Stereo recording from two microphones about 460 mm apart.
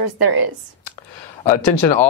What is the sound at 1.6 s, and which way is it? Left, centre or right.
Speech, left.